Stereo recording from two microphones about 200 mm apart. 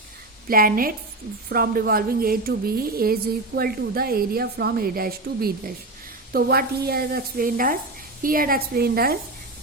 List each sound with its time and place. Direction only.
0.4 s a woman's voice: 45° right (ahead or behind)